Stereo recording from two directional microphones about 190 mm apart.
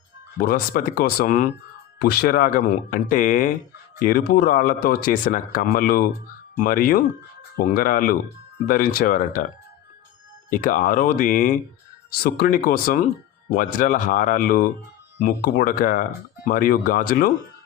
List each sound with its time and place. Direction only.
0.3 s speech: 50° left (ahead or behind)
10.5 s speech: 45° left (ahead or behind)